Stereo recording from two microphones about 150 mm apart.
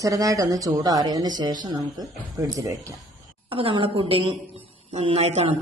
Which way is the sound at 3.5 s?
35° right (ahead or behind).